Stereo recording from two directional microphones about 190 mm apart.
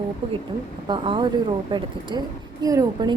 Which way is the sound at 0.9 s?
25° right (ahead or behind).